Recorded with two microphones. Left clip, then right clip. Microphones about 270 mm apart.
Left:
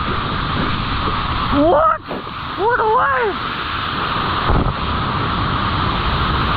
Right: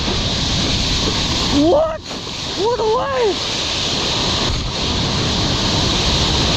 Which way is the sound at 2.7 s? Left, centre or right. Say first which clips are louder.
Left 4 dB; right.